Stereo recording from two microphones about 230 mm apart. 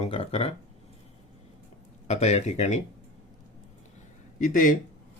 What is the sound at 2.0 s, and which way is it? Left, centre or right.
Speech, left.